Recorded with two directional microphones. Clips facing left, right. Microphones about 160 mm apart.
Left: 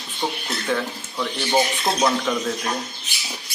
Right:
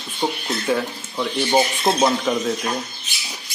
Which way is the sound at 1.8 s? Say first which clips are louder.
Right 3 dB; 25° right (ahead or behind).